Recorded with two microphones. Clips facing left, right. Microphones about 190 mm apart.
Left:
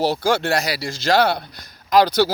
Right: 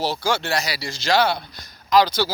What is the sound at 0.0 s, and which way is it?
A man's voice, 55° left (ahead or behind).